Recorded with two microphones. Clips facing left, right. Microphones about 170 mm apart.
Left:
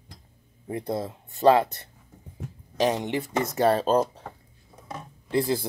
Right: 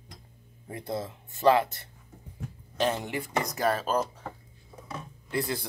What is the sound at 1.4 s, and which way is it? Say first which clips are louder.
Speech: left 3 dB; 20° left (ahead or behind).